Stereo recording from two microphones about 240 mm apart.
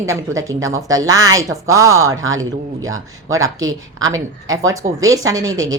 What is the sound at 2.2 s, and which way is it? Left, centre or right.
Speech, right.